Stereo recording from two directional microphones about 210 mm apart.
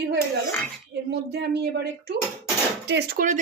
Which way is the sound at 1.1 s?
50° right (ahead or behind).